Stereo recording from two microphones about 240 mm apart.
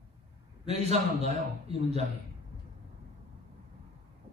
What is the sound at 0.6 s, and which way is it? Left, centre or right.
A man's voice, right.